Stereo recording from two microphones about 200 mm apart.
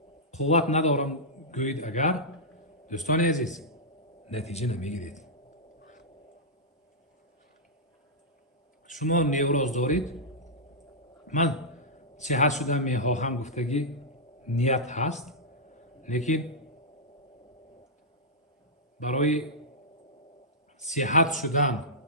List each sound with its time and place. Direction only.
0.3 s a man's voice: 35° left (ahead or behind)
3.5 s a man's voice: centre (ahead or behind)
4.3 s a man's voice: 30° left (ahead or behind)
8.9 s a man's voice: 40° left (ahead or behind)
11.3 s a man's voice: 35° left (ahead or behind)
18.9 s a man's voice: 35° left (ahead or behind)
20.7 s a man's voice: 35° left (ahead or behind)